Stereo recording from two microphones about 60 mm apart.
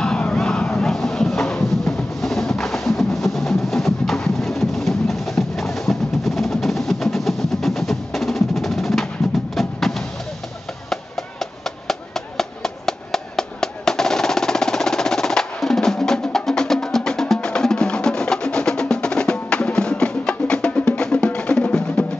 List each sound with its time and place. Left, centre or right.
0.0 s crowd: centre
0.4 s a sound: centre
9.6 s vehicle: centre
10.9 s music: centre